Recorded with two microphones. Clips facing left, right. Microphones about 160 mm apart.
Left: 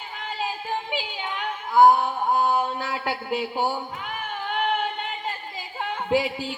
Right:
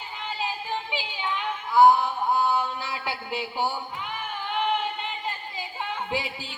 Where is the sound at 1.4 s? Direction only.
45° left (ahead or behind).